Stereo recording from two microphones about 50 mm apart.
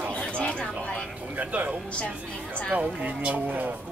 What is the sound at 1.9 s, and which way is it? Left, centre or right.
Speech, left.